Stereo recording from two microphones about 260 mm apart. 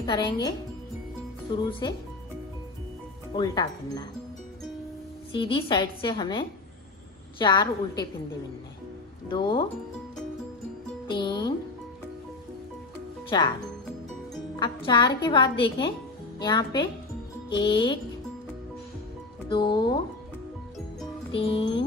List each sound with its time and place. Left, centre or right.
0.0 s a woman's voice: centre
1.5 s a woman's voice: centre
3.3 s a woman's voice: centre
5.3 s a woman's voice: centre
9.3 s a woman's voice: centre
11.1 s a woman's voice: centre
13.3 s a woman's voice: centre
14.6 s a woman's voice: centre
19.5 s a woman's voice: centre
21.3 s a woman's voice: centre